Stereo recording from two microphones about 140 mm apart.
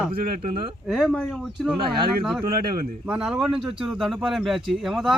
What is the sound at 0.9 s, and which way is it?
Speech, centre (ahead or behind).